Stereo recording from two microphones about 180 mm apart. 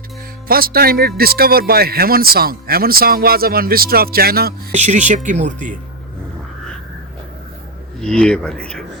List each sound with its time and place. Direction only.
0.4 s speech: 55° right (ahead or behind)
4.7 s speech: 40° right (ahead or behind)
7.9 s speech: 5° left (ahead or behind)